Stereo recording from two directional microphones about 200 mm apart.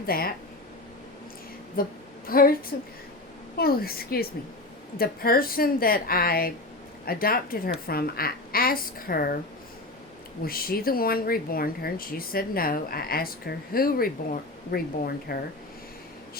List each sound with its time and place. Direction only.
0.0 s speech: 50° left (ahead or behind)
1.8 s speech: 45° left (ahead or behind)
3.6 s speech: 50° left (ahead or behind)
10.4 s speech: 50° left (ahead or behind)